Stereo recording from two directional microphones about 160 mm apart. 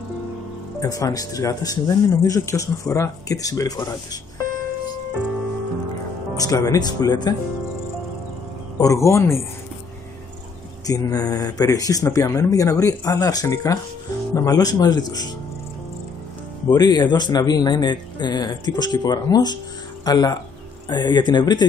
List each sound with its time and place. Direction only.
0.7 s speech: 20° left (ahead or behind)
6.3 s speech: 20° left (ahead or behind)
8.7 s speech: 20° left (ahead or behind)
10.9 s speech: 25° left (ahead or behind)
16.6 s speech: 25° left (ahead or behind)